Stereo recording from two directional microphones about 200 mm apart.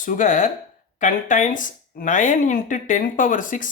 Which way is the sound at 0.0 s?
40° left (ahead or behind).